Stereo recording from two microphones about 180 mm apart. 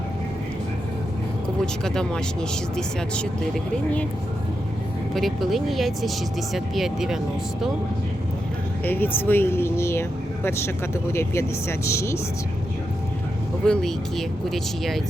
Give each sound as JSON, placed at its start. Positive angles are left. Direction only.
{"t": 1.6, "sound": "speech", "side_deg": 5}
{"t": 5.1, "sound": "speech", "side_deg": 0}
{"t": 8.8, "sound": "speech", "side_deg": 10}
{"t": 13.7, "sound": "speech", "side_deg": 0}